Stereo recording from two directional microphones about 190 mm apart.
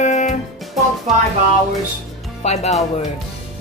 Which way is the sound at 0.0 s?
40° left (ahead or behind).